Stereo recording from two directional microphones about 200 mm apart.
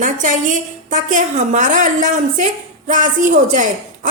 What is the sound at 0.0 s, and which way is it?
A woman's voice, 40° right (ahead or behind).